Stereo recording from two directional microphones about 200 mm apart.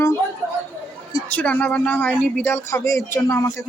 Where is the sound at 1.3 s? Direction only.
5° left (ahead or behind).